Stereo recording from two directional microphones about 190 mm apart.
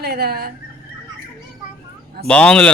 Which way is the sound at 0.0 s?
55° right (ahead or behind).